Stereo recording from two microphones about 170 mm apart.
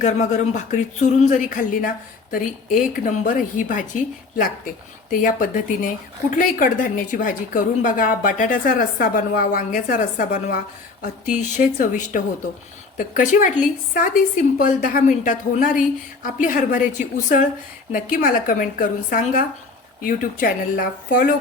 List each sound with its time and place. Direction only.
0.0 s a woman's voice: 45° left (ahead or behind)